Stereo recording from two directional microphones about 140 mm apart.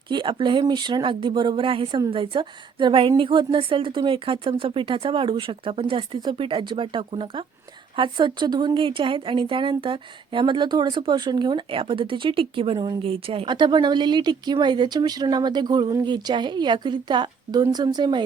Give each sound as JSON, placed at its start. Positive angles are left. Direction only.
{"t": 0.1, "sound": "speech", "side_deg": -35}